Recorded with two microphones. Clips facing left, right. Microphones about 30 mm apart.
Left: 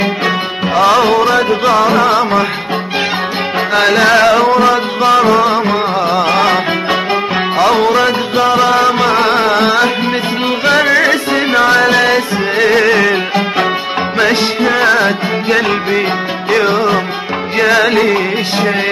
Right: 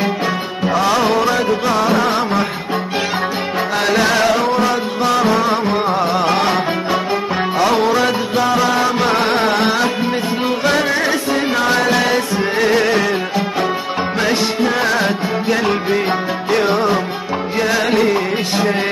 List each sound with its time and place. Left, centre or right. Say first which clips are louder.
0.7 s music: left 6 dB; left
3.7 s music: left 6 dB; left
4.3 s music: left 6 dB; left
14.1 s music: left 5 dB; left